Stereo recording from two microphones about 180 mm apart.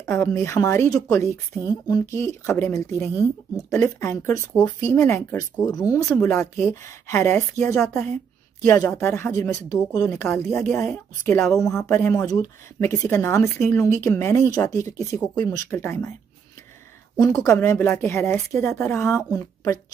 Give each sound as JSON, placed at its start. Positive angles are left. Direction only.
{"t": 0.0, "sound": "speech", "side_deg": 15}
{"t": 1.9, "sound": "speech", "side_deg": 20}
{"t": 6.0, "sound": "speech", "side_deg": 5}
{"t": 17.3, "sound": "speech", "side_deg": 15}